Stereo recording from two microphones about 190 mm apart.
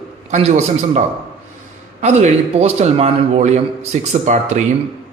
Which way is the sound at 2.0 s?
35° right (ahead or behind).